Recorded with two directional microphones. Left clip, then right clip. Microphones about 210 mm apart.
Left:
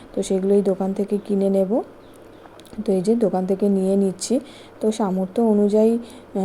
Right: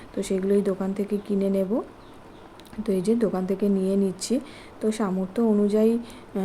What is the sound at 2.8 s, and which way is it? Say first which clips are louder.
A woman's voice: left 4 dB; 20° left (ahead or behind).